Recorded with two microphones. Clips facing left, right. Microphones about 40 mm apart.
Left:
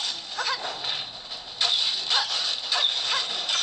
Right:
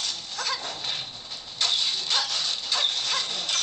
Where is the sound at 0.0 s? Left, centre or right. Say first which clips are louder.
Left 2 dB; centre.